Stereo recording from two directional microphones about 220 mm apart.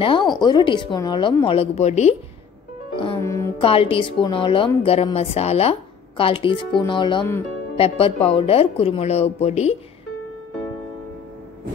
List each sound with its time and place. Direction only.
0.0 s a woman's voice: 20° left (ahead or behind)
3.0 s music: 20° left (ahead or behind)
3.6 s a woman's voice: 25° left (ahead or behind)